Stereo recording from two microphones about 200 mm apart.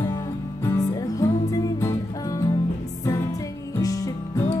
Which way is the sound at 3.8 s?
15° left (ahead or behind).